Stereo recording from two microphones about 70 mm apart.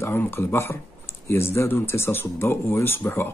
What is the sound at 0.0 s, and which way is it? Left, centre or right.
Speech, left.